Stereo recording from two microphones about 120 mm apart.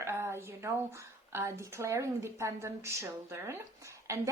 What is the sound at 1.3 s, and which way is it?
A woman's voice, 20° right (ahead or behind).